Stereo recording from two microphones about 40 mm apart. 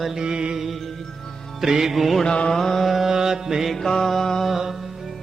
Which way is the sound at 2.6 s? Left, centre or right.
Centre.